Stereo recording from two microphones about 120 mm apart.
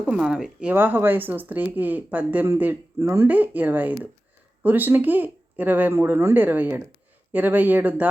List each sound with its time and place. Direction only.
0.0 s speech: 5° right (ahead or behind)